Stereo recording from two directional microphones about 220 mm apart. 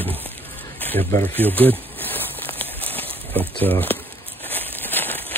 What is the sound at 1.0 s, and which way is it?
Speech, 35° right (ahead or behind).